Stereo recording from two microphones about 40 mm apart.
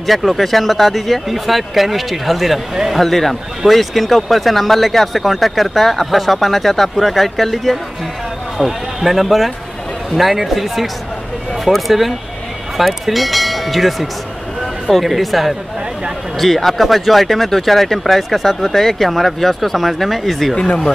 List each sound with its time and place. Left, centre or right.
0.0 s speech: centre
20.5 s speech: left